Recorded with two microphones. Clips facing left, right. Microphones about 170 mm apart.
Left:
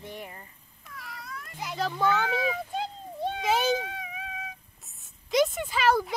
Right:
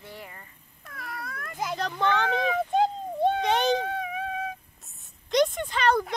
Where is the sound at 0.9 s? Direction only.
55° right (ahead or behind).